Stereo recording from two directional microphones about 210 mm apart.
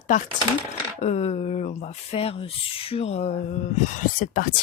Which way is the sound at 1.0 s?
30° left (ahead or behind).